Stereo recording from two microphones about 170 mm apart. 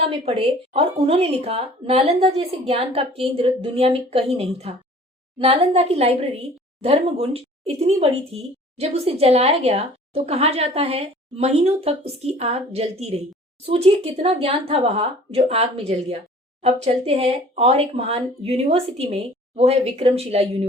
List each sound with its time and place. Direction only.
0.0 s speech: 35° right (ahead or behind)